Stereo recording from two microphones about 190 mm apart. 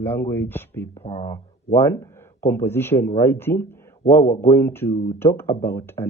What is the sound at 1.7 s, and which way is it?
Speech, 10° left (ahead or behind).